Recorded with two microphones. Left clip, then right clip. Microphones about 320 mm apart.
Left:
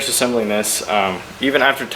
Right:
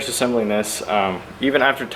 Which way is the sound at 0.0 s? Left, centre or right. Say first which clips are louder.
Left 2 dB; centre.